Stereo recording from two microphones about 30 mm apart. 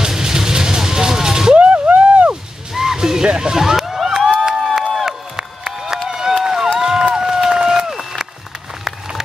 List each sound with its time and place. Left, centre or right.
0.0 s music: centre
2.0 s a sound: right
2.7 s music: centre
3.3 s a sound: right
4.3 s crowd: right
5.0 s crowd: centre
6.0 s run: right
7.2 s run: centre
7.5 s run: right